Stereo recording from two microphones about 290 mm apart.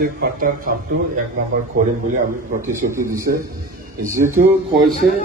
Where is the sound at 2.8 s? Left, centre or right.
Right.